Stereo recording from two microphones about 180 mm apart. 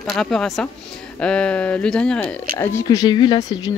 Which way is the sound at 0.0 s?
Centre (ahead or behind).